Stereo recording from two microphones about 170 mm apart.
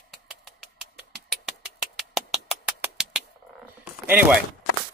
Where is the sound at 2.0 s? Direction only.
Centre (ahead or behind).